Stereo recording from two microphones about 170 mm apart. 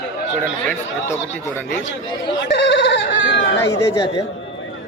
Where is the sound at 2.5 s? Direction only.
85° left.